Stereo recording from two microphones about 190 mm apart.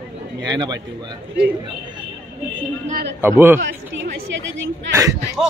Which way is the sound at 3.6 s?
75° right (ahead or behind).